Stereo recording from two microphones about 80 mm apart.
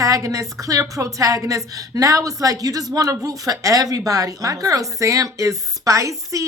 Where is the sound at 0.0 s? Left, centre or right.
Right.